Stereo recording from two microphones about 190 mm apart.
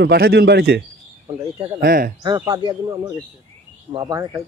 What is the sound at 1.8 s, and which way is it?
Speech, 50° right (ahead or behind).